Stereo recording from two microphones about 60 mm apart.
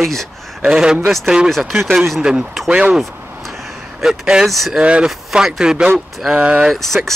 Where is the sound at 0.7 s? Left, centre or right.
Centre.